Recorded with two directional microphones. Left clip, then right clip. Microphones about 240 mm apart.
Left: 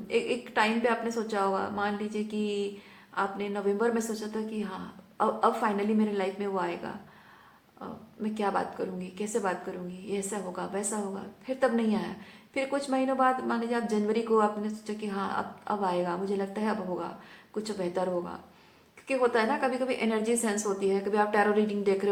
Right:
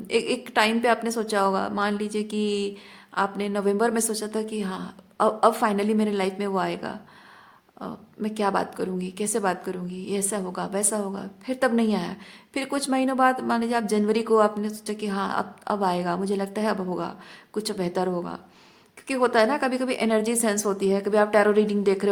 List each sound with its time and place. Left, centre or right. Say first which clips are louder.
0.1 s a woman's voice: right 4 dB; right